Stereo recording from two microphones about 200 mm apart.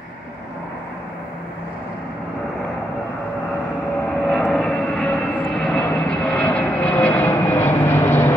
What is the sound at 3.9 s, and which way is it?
Vehicle, 5° left (ahead or behind).